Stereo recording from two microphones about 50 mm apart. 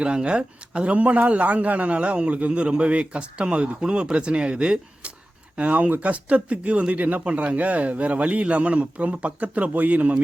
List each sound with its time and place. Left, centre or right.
0.0 s a man's voice: centre